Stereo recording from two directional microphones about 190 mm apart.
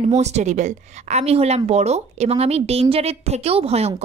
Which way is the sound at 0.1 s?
35° right (ahead or behind).